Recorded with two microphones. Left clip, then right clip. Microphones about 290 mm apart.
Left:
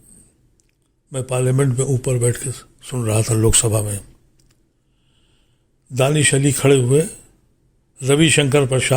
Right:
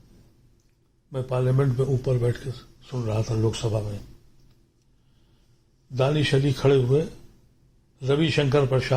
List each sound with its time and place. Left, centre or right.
1.1 s a man's voice: left
5.9 s a man's voice: left